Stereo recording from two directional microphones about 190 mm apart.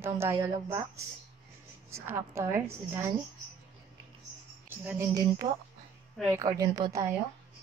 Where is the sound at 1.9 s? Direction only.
15° right (ahead or behind).